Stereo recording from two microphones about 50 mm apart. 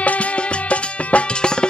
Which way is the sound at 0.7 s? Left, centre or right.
Left.